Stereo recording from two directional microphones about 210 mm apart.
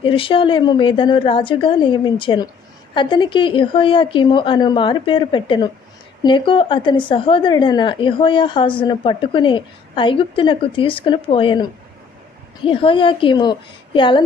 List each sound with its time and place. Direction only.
0.0 s a woman's voice: 25° left (ahead or behind)